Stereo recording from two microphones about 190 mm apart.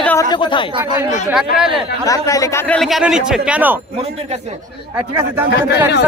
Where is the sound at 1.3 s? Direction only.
5° right (ahead or behind).